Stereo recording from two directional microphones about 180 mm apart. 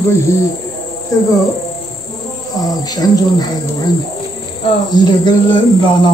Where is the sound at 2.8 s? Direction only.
20° left (ahead or behind).